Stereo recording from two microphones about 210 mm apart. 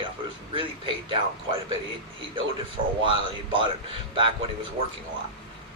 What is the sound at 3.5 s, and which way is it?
Speech, 25° right (ahead or behind).